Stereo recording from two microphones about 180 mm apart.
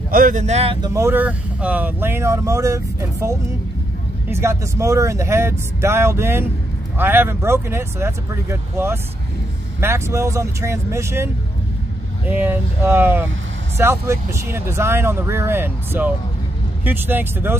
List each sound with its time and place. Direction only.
0.1 s speech: 45° right (ahead or behind)
0.7 s speech: 20° right (ahead or behind)
12.3 s speech: 10° right (ahead or behind)